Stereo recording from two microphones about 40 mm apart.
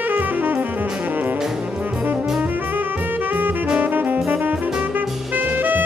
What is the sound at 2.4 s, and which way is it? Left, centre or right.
Music, right.